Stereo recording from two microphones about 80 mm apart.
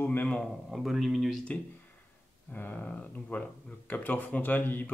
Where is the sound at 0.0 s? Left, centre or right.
Left.